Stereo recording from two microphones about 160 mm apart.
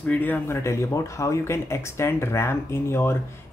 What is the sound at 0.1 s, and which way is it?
Speech, 10° left (ahead or behind).